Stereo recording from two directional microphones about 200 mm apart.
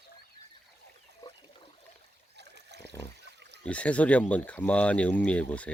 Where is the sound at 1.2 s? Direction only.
20° left (ahead or behind).